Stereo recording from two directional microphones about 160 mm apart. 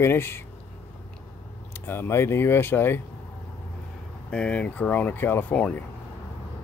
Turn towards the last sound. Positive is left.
turn(degrees=10)  # may be behind; listen again after turning